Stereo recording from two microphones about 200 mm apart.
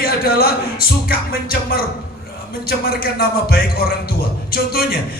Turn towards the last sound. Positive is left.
turn(degrees=50)  # may be behind; listen again after turning